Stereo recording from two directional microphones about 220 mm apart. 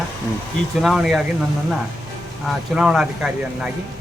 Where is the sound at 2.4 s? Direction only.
Centre (ahead or behind).